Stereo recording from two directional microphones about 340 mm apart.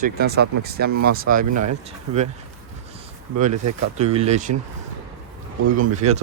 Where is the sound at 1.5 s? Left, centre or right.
Right.